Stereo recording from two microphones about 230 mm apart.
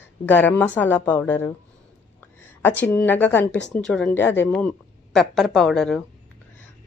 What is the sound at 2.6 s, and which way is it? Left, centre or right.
A woman's voice, centre.